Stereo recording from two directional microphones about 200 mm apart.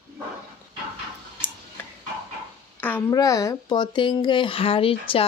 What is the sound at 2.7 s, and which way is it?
Speech, 10° left (ahead or behind).